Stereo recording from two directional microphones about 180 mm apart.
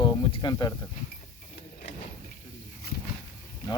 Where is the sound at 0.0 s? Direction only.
25° left (ahead or behind).